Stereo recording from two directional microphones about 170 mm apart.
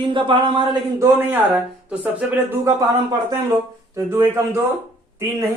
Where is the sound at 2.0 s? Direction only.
10° right (ahead or behind).